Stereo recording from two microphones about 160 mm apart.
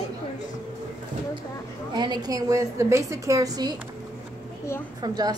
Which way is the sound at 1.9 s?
25° right (ahead or behind).